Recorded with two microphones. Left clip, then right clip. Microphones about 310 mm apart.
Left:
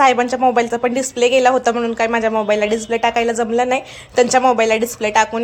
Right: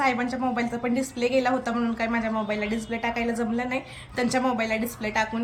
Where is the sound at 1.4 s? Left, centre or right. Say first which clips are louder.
Left 11 dB; centre.